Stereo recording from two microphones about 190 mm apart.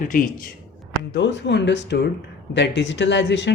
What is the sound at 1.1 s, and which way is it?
Speech, 70° left (ahead or behind).